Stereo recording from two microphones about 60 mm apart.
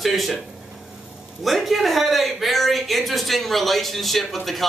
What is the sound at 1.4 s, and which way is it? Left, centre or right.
A woman's voice, centre.